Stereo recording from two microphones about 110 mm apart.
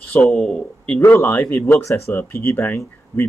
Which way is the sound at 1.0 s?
20° left (ahead or behind).